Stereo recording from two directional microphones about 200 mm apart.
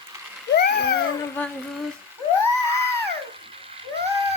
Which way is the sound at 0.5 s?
55° left (ahead or behind).